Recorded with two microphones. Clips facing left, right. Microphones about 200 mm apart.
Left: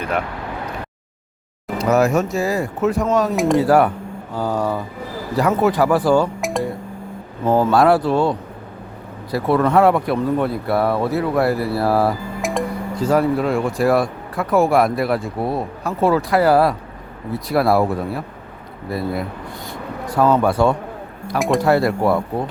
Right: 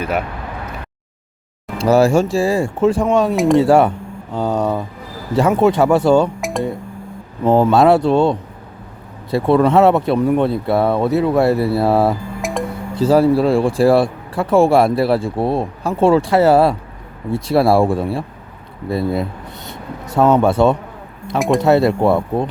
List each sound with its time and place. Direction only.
1.8 s speech: 30° right (ahead or behind)
3.3 s speech: centre (ahead or behind)
3.6 s speech: 25° right (ahead or behind)
6.4 s music: centre (ahead or behind)
7.4 s speech: 25° right (ahead or behind)
12.4 s music: centre (ahead or behind)
12.9 s speech: 30° right (ahead or behind)
21.3 s speech: centre (ahead or behind)
21.6 s speech: 25° right (ahead or behind)